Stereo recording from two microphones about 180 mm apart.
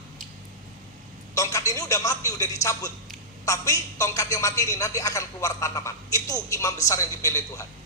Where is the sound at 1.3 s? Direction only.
15° left (ahead or behind).